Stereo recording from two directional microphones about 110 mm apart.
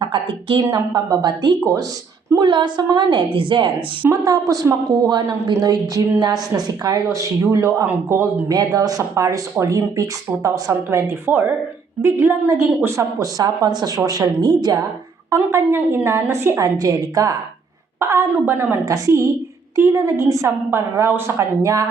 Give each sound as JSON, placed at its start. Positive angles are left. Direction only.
{"t": 0.0, "sound": "a woman's voice", "side_deg": -45}
{"t": 0.6, "sound": "a woman's voice", "side_deg": -35}
{"t": 2.4, "sound": "a woman's voice", "side_deg": -45}
{"t": 4.1, "sound": "a woman's voice", "side_deg": -35}
{"t": 8.4, "sound": "a woman's voice", "side_deg": -35}
{"t": 15.4, "sound": "speech", "side_deg": -25}
{"t": 16.7, "sound": "a woman's voice", "side_deg": -35}